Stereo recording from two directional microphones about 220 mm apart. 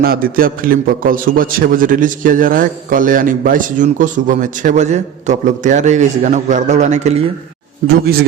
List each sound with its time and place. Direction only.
0.0 s a man's voice: 40° right (ahead or behind)